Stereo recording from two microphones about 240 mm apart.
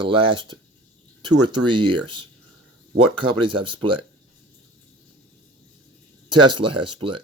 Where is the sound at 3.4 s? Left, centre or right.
Right.